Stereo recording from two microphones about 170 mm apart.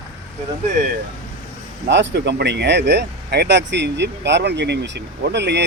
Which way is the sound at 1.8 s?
85° right.